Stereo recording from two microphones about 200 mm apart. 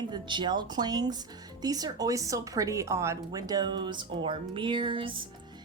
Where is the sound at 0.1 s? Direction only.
20° right (ahead or behind).